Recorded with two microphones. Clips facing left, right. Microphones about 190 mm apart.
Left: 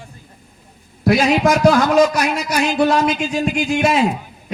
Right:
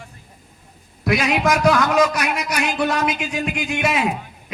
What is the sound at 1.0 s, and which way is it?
A man's voice, 35° left (ahead or behind).